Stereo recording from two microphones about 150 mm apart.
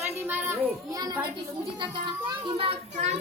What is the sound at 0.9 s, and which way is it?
Child singing, 25° right (ahead or behind).